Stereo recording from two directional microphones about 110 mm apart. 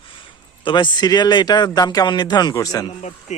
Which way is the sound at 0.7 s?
45° left (ahead or behind).